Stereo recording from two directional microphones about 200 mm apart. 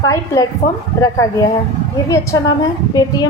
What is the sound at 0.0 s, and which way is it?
A woman's voice, 15° left (ahead or behind).